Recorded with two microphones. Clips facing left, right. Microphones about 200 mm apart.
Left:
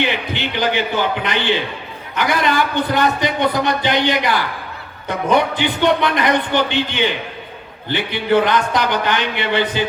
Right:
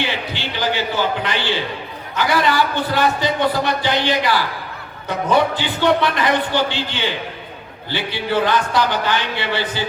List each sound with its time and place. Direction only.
0.0 s a man's voice: 20° left (ahead or behind)